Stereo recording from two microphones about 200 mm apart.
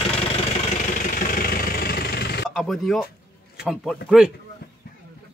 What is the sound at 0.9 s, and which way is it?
Vehicle, 45° left (ahead or behind).